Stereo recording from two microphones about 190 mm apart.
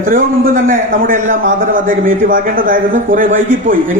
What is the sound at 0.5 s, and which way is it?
A man's voice, 45° right (ahead or behind).